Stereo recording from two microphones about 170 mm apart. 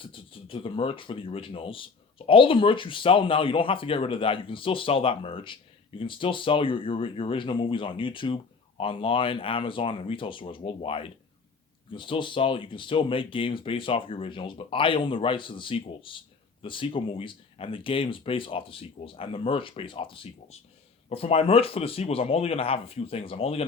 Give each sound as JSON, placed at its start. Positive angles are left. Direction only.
{"t": 0.0, "sound": "speech", "side_deg": 30}